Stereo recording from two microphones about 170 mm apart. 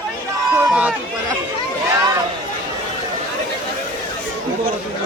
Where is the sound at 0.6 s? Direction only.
5° right (ahead or behind).